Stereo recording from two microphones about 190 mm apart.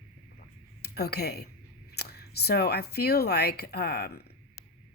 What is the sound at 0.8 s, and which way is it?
A woman's voice, 55° left (ahead or behind).